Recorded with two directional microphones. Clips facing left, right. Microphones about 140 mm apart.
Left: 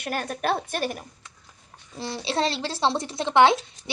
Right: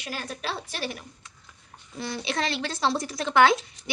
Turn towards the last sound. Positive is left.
turn(degrees=25)  # may be behind; listen again after turning